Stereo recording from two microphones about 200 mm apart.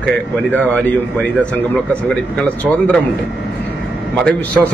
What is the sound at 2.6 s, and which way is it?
Speech, 5° left (ahead or behind).